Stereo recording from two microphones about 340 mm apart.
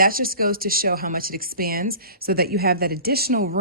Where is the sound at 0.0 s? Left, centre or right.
Right.